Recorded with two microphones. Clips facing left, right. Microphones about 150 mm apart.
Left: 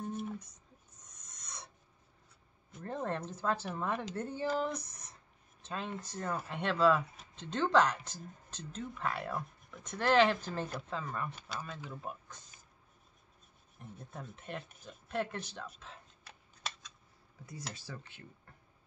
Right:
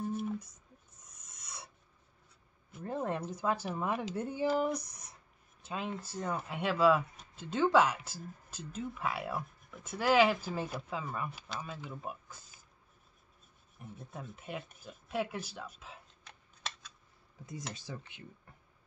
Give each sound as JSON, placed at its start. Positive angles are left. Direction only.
{"t": 0.0, "sound": "a sound", "side_deg": -5}
{"t": 1.3, "sound": "filing", "side_deg": -5}
{"t": 2.7, "sound": "speech", "side_deg": -5}
{"t": 13.7, "sound": "speech", "side_deg": -5}
{"t": 17.5, "sound": "speech", "side_deg": -20}